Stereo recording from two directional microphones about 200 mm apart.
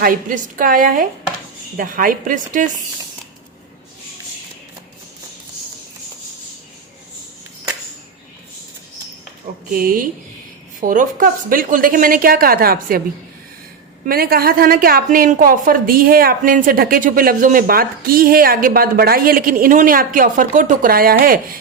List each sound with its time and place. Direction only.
0.0 s a woman's voice: 45° right (ahead or behind)
9.7 s a woman's voice: 45° right (ahead or behind)
14.1 s a woman's voice: 50° right (ahead or behind)